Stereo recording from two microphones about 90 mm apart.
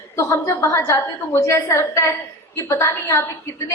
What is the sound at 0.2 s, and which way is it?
A woman's voice, 35° left (ahead or behind).